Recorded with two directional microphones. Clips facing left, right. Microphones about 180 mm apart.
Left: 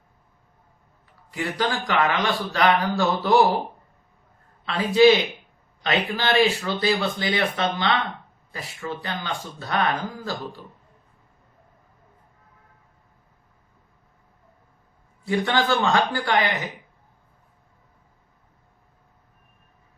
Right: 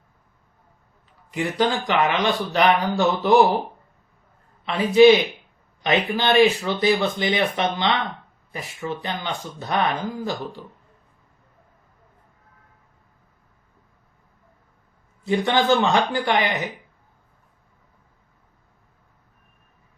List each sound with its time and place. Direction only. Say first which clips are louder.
1.3 s speech: right 4 dB; 20° right (ahead or behind)
4.6 s speech: right 3 dB; 20° right (ahead or behind)
15.2 s speech: right 2 dB; 20° right (ahead or behind)